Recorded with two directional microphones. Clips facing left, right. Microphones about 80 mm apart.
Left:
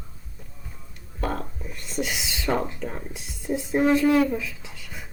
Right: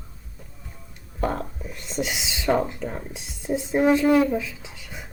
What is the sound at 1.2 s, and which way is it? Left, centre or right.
Whispering, centre.